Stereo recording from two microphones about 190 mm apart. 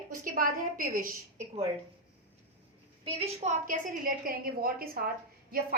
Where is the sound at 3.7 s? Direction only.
50° right (ahead or behind).